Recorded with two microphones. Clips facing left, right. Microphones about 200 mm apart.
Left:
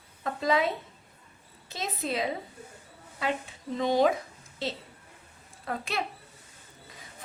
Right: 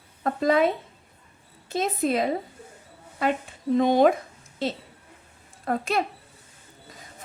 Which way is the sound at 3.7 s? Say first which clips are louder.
Right 6 dB; 55° right (ahead or behind).